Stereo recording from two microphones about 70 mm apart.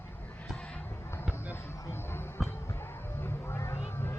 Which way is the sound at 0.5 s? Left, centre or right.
Centre.